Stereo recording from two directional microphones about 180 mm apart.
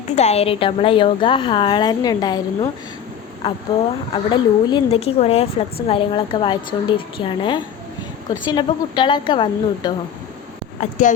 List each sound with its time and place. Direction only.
0.2 s a woman's voice: 35° left (ahead or behind)
4.1 s a woman's voice: 25° left (ahead or behind)
10.8 s speech: 45° left (ahead or behind)